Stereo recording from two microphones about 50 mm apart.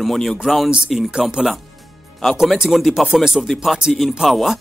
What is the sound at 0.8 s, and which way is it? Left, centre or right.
Speech, centre.